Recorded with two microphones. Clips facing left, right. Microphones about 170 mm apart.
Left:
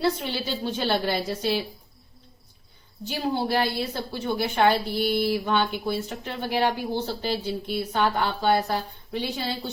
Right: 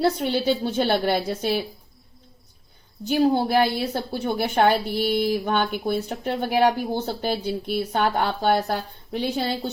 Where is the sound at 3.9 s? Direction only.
45° right (ahead or behind).